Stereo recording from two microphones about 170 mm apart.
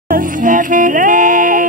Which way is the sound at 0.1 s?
50° right (ahead or behind).